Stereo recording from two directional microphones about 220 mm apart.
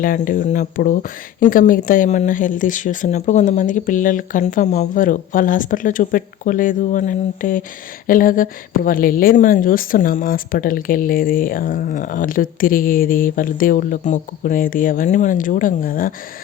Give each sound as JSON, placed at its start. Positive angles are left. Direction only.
{"t": 0.0, "sound": "a woman's voice", "side_deg": 40}